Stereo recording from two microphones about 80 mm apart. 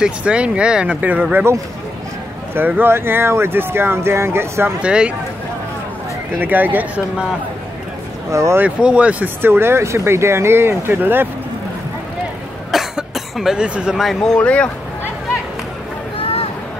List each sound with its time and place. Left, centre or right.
0.0 s speech: centre
1.3 s speech: right
4.8 s speech: centre
6.4 s speech: right
8.3 s speech: right
8.5 s speech: centre
9.4 s speech: right
12.7 s cough: centre
14.0 s speech: centre